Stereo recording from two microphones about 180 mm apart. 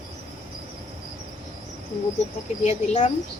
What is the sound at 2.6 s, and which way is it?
Speech, 40° left (ahead or behind).